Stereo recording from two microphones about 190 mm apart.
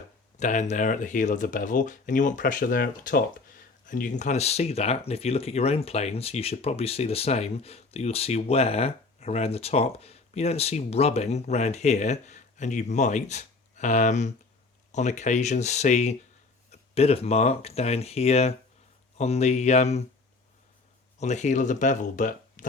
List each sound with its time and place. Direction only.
0.3 s speech: 40° left (ahead or behind)
21.2 s speech: 35° left (ahead or behind)